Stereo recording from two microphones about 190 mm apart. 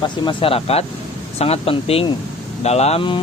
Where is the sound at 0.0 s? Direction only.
25° left (ahead or behind).